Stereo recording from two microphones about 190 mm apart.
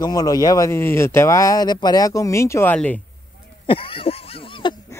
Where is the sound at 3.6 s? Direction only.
30° left (ahead or behind).